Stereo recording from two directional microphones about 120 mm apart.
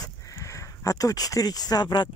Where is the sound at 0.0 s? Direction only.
30° left (ahead or behind).